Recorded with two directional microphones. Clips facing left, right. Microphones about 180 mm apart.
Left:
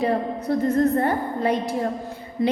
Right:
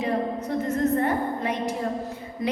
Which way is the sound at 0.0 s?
35° left (ahead or behind).